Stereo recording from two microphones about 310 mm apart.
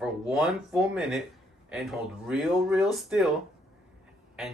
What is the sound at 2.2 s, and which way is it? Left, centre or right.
Speech, centre.